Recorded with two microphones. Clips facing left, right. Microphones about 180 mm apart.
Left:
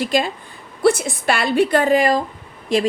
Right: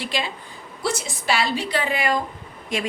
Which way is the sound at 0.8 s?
55° left (ahead or behind).